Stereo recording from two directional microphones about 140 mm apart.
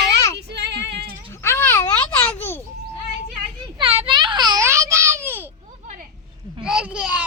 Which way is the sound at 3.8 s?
40° right (ahead or behind).